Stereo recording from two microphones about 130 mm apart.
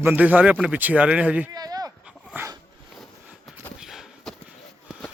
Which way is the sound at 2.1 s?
15° right (ahead or behind).